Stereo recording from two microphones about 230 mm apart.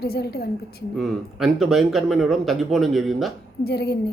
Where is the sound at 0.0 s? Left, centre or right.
Left.